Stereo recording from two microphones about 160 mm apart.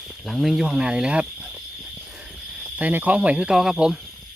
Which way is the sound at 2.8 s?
10° right (ahead or behind).